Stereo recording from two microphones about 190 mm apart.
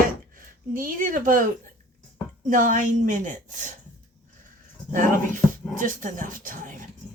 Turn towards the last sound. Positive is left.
turn(degrees=-45)  # may be behind; listen again after turning